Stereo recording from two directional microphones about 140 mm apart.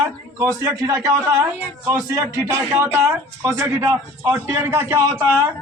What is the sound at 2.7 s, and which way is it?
A man's voice, 20° right (ahead or behind).